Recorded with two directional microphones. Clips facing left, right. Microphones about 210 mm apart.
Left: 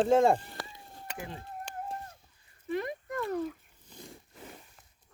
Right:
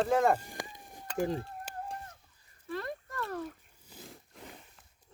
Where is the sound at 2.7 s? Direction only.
20° left (ahead or behind).